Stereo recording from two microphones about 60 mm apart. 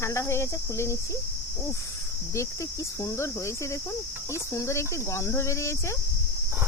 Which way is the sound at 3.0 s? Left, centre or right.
Left.